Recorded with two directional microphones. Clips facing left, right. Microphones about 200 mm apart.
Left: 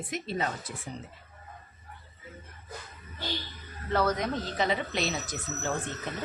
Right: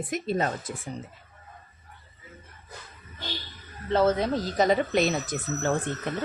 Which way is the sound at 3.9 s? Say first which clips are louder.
Right 5 dB; 25° right (ahead or behind).